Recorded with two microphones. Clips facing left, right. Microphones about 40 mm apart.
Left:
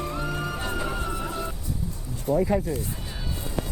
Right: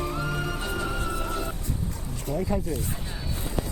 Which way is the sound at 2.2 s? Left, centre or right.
Left.